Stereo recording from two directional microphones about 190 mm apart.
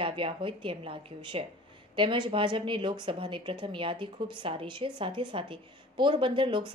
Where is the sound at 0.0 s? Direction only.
25° right (ahead or behind).